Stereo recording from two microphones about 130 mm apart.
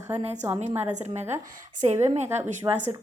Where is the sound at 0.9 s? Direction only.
65° right (ahead or behind).